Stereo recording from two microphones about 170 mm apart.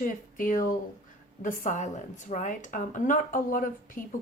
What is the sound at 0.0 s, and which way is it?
Speech, 50° left (ahead or behind).